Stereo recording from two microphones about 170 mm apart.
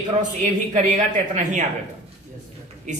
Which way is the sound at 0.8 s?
45° right (ahead or behind).